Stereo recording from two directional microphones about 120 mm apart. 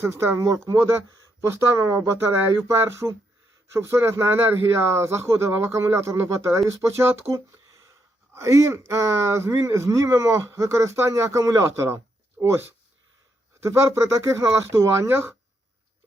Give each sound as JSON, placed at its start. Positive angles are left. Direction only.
{"t": 0.0, "sound": "speech", "side_deg": -20}